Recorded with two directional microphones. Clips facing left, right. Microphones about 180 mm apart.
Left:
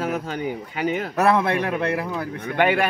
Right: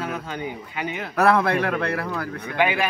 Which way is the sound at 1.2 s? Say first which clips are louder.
Right 1 dB; 20° left (ahead or behind).